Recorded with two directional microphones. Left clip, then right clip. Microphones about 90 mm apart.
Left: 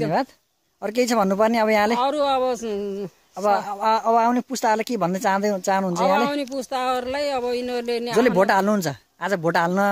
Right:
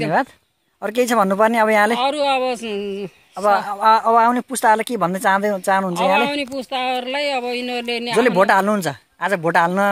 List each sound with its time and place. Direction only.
0.8 s speech: 20° left (ahead or behind)
2.0 s speech: 35° left (ahead or behind)
8.2 s a man's voice: 45° left (ahead or behind)